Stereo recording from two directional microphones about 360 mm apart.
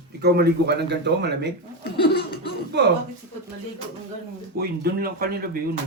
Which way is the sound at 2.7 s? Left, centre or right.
Right.